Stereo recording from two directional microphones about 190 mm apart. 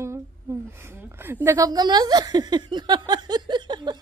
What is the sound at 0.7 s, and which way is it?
A woman's voice, 10° right (ahead or behind).